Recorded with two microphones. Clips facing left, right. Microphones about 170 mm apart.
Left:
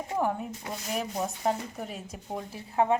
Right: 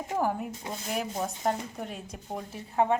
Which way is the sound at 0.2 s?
Centre (ahead or behind).